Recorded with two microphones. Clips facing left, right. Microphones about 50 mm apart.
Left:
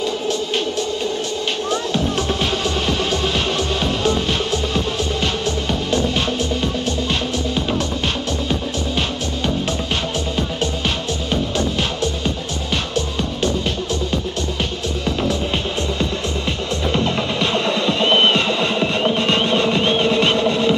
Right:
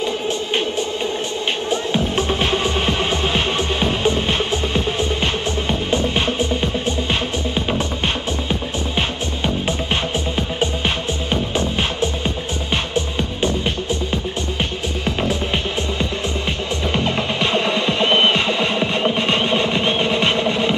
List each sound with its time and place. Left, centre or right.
0.0 s music: right
8.5 s music: right
11.2 s music: right
16.9 s music: right